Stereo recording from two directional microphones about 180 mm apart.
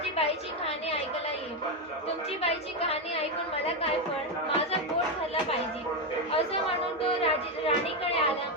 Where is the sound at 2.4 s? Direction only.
35° left (ahead or behind).